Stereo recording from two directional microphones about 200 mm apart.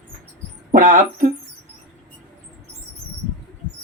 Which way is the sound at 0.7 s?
40° right (ahead or behind).